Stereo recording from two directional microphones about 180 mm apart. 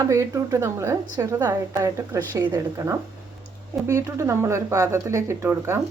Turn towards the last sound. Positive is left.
turn(degrees=-15)  # may be behind; listen again after turning